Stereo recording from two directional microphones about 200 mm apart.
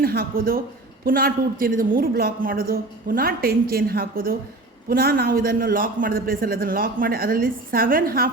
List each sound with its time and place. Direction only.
0.0 s a man's voice: 50° right (ahead or behind)